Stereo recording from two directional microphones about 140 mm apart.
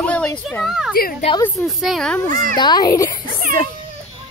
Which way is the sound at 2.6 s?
30° left (ahead or behind).